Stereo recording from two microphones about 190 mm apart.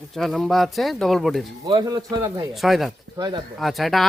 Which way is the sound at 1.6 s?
20° right (ahead or behind).